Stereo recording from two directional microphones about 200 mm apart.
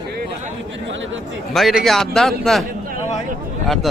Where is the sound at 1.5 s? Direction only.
Centre (ahead or behind).